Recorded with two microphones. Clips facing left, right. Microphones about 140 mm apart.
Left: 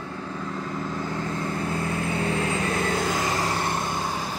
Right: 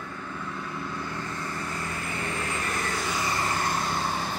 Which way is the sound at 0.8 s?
45° left (ahead or behind).